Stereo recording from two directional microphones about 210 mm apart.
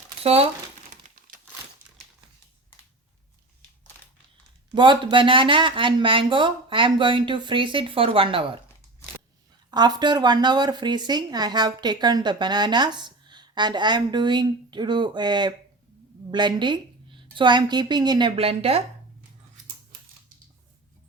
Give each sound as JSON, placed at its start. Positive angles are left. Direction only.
{"t": 0.2, "sound": "speech", "side_deg": -30}
{"t": 1.0, "sound": "crumpling", "side_deg": -35}
{"t": 4.7, "sound": "speech", "side_deg": -20}
{"t": 9.6, "sound": "speech", "side_deg": -20}